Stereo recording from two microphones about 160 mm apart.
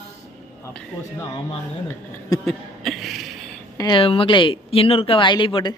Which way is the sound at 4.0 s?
35° left (ahead or behind).